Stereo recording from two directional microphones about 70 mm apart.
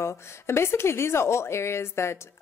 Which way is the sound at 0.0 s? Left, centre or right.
Left.